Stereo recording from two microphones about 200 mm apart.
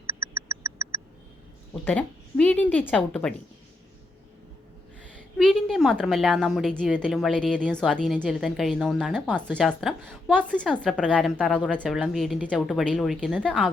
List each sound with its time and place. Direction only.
0.1 s a sound: 15° right (ahead or behind)
1.7 s a woman's voice: 5° left (ahead or behind)
5.4 s a woman's voice: centre (ahead or behind)